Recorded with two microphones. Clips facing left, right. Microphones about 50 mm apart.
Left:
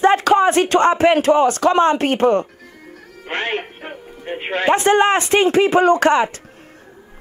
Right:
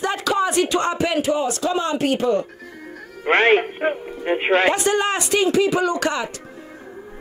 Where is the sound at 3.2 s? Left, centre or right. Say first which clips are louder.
Right 8 dB; right.